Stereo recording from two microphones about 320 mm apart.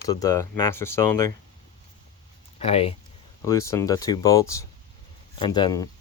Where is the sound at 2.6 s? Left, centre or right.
Centre.